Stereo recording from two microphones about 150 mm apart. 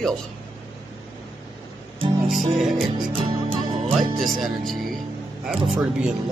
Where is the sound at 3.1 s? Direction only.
35° right (ahead or behind).